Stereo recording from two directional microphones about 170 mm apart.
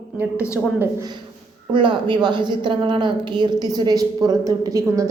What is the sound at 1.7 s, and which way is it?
A woman's voice, 30° right (ahead or behind).